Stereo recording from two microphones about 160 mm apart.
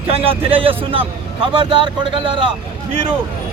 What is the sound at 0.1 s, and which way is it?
Speech, 35° right (ahead or behind).